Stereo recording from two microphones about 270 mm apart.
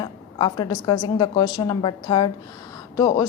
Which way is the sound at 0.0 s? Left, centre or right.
Centre.